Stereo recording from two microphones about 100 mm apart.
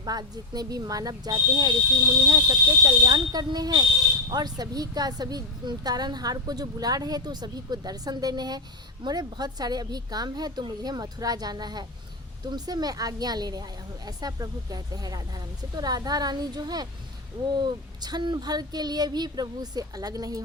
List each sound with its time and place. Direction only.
0.0 s a woman's voice: 40° right (ahead or behind)